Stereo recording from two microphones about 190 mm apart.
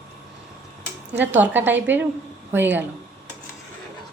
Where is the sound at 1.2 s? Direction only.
10° right (ahead or behind).